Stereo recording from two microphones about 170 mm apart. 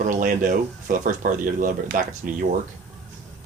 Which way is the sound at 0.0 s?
50° right (ahead or behind).